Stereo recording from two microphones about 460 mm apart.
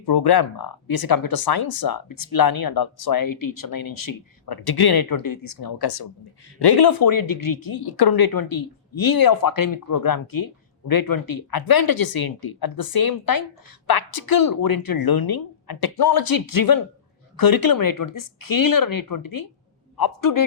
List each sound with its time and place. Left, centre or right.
0.0 s speech: left